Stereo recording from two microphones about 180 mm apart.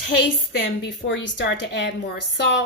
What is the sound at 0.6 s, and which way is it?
A woman's voice, 85° left.